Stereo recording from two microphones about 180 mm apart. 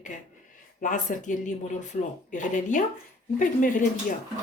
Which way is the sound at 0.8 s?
45° left (ahead or behind).